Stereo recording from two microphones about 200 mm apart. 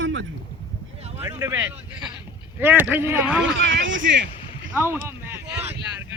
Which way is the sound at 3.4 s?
70° right (ahead or behind).